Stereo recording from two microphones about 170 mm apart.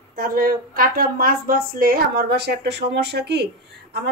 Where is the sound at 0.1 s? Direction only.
55° right (ahead or behind).